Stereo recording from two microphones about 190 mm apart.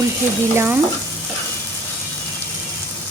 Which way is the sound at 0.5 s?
15° right (ahead or behind).